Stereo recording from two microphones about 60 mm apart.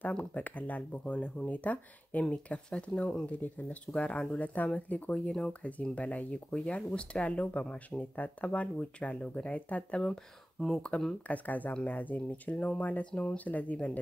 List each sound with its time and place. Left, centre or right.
0.1 s speech: left
11.2 s speech: left
13.1 s speech: centre